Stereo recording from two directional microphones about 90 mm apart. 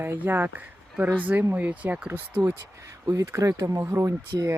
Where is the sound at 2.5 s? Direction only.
35° right (ahead or behind).